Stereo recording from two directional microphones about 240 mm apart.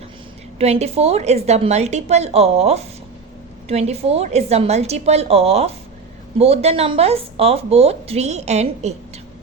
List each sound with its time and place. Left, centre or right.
0.6 s a woman's voice: right